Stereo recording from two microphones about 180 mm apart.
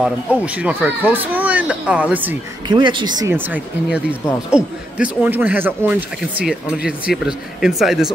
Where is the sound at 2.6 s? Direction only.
25° right (ahead or behind).